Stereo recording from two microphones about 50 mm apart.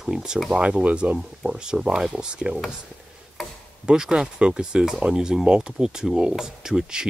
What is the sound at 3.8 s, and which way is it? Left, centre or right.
Speech, centre.